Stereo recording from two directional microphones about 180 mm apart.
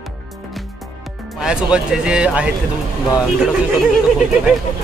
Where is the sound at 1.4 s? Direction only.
5° right (ahead or behind).